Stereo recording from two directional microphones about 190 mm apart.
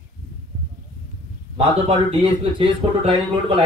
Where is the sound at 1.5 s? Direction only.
30° right (ahead or behind).